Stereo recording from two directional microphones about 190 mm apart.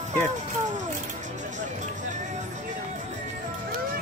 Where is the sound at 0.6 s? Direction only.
40° right (ahead or behind).